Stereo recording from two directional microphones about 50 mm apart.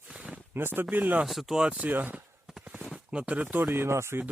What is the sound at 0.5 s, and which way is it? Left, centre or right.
Speech, right.